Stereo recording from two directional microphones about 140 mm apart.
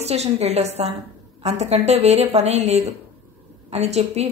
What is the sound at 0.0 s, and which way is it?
A woman's voice, 50° right (ahead or behind).